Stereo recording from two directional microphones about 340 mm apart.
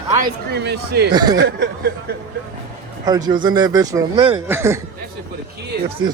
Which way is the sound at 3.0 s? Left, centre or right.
Centre.